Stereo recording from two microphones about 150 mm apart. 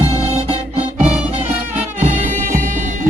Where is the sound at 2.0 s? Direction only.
60° right (ahead or behind).